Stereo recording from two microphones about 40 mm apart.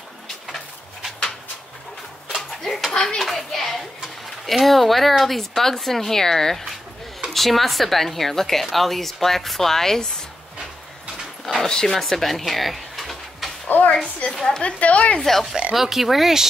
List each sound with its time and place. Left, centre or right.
2.6 s a sound: centre
2.9 s a child's voice: left
3.3 s speech: centre
11.4 s speech: centre
13.7 s a sound: left
14.3 s speech: centre
14.6 s speech: left
15.2 s speech: centre
15.7 s speech: centre